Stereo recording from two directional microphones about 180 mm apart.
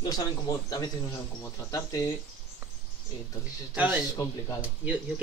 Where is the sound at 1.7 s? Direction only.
20° left (ahead or behind).